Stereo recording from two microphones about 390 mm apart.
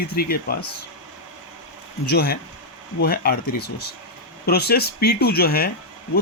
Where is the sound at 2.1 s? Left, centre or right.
Left.